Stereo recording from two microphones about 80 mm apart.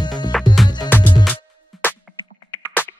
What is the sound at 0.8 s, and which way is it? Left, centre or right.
Music, left.